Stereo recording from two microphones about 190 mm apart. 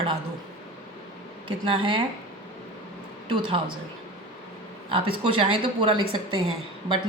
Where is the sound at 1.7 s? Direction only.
25° right (ahead or behind).